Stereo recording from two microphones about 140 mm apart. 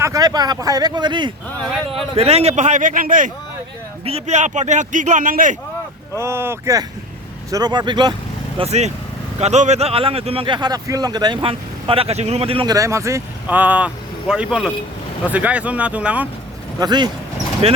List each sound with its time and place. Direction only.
0.0 s speech: 25° right (ahead or behind)
1.7 s speech: centre (ahead or behind)
2.1 s speech: 50° right (ahead or behind); by 3.3 s 70° right (ahead or behind)
4.0 s speech: 50° right (ahead or behind); by 5.5 s 75° right (ahead or behind)
6.1 s speech: 20° right (ahead or behind)
7.5 s speech: 30° right (ahead or behind)
8.5 s speech: 50° right (ahead or behind)
12.6 s speech: 25° right (ahead or behind)
16.8 s speech: 30° right (ahead or behind)
17.6 s speech: 45° right (ahead or behind)